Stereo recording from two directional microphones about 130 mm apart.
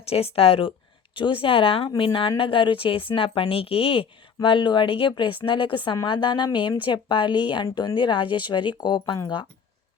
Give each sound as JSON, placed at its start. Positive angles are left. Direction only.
{"t": 0.1, "sound": "a woman's voice", "side_deg": 50}